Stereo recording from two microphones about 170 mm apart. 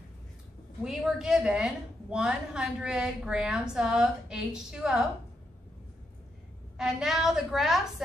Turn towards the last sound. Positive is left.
turn(degrees=0)  # may be behind; listen again after turning